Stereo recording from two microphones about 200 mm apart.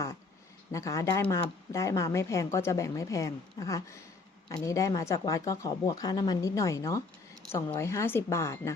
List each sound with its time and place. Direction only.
0.7 s speech: 15° left (ahead or behind)